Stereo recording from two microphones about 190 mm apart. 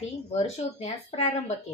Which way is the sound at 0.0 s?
35° left (ahead or behind).